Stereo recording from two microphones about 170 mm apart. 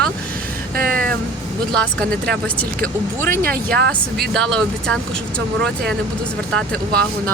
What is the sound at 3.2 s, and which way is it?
Speech, 60° right (ahead or behind).